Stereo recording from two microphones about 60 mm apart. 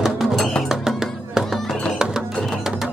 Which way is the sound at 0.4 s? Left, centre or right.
Centre.